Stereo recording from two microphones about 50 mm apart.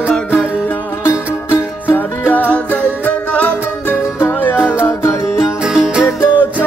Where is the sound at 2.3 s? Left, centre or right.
Left.